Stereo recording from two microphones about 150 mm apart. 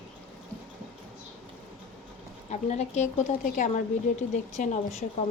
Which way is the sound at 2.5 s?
50° left (ahead or behind).